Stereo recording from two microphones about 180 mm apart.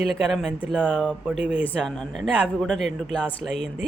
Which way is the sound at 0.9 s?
5° left (ahead or behind).